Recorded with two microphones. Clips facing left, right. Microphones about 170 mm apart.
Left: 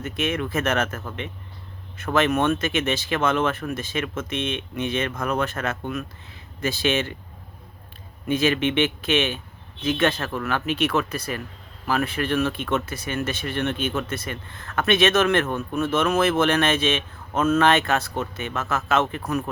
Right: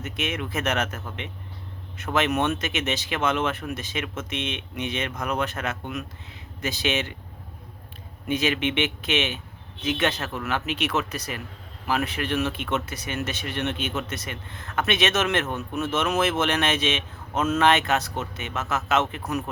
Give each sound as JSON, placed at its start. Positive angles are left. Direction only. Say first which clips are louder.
{"t": 0.0, "sound": "speech", "louder": "left 4 dB", "side_deg": -20}
{"t": 2.1, "sound": "a man's voice", "louder": "left 3 dB", "side_deg": -20}
{"t": 8.3, "sound": "a man's voice", "louder": "left 3 dB", "side_deg": -15}